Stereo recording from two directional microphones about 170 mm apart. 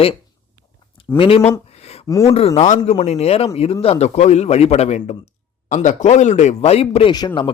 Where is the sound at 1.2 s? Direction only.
35° left (ahead or behind).